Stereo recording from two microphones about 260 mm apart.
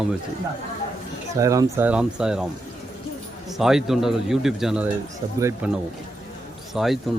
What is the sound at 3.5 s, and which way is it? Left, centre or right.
Speech, centre.